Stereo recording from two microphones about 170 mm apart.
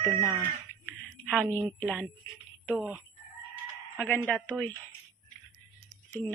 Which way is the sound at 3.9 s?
10° left (ahead or behind).